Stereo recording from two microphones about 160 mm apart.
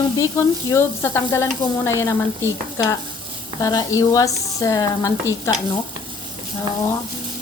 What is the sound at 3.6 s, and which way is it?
Speech, 20° left (ahead or behind).